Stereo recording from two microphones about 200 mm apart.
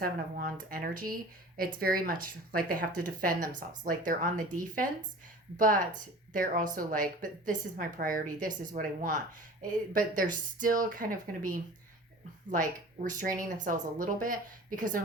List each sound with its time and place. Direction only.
0.0 s speech: 50° right (ahead or behind)